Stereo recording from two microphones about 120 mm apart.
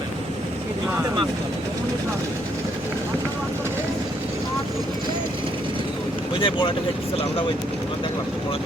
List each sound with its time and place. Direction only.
6.4 s speech: 45° left (ahead or behind)